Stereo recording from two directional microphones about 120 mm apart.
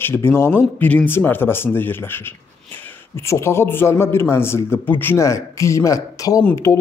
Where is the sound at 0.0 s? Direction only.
20° left (ahead or behind).